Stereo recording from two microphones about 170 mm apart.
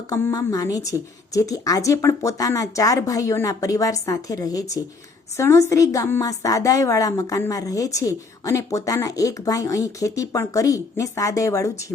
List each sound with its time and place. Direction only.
0.1 s a woman's voice: 20° left (ahead or behind)